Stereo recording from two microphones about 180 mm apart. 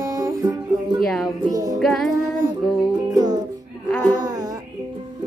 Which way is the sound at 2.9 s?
20° right (ahead or behind).